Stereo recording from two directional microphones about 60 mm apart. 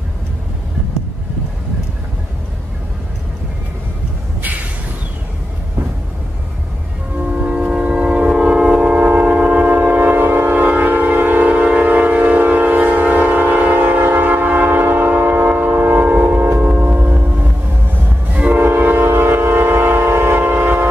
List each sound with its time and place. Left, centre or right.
7.3 s train: centre
16.6 s music: right
18.3 s train: right
18.6 s train: right